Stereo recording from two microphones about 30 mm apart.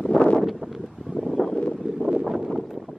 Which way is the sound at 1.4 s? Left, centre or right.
Centre.